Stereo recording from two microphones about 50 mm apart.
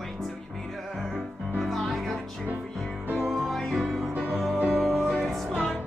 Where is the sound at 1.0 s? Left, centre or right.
Centre.